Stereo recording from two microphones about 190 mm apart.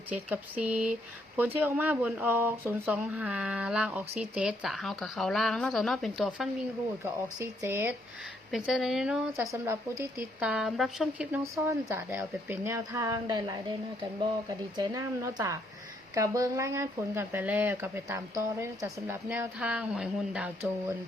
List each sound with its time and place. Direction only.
0.1 s speech: 10° right (ahead or behind)
7.0 s speech: 15° right (ahead or behind)
11.6 s speech: 15° right (ahead or behind)
14.8 s speech: 15° right (ahead or behind)